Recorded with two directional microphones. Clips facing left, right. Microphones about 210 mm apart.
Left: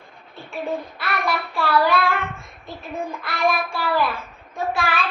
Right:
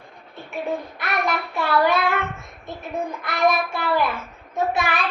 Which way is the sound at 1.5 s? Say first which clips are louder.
Even; 20° right (ahead or behind).